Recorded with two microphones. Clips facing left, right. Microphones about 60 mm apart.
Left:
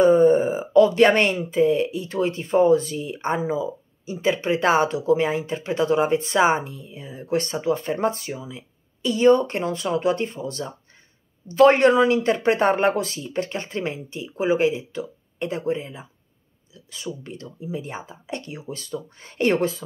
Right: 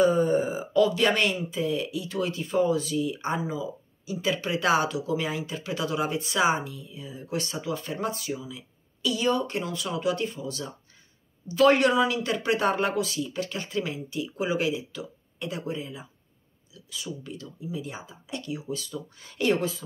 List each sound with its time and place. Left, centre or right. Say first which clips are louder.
0.0 s speech: left 7 dB; left